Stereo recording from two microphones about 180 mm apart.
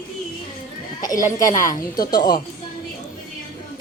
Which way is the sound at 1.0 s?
20° left (ahead or behind).